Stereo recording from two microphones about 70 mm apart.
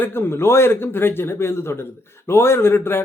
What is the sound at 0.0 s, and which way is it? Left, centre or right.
A man's voice, left.